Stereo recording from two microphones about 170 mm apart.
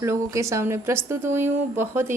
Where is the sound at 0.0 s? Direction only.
15° right (ahead or behind).